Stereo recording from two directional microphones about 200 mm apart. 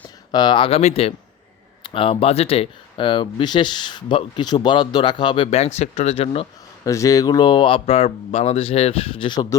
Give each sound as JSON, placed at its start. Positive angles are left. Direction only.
{"t": 0.3, "sound": "speech", "side_deg": 20}
{"t": 6.8, "sound": "speech", "side_deg": 15}